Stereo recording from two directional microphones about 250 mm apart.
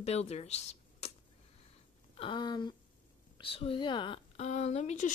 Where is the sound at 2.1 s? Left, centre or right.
Centre.